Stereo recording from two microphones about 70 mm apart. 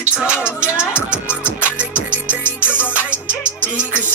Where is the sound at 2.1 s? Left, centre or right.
Left.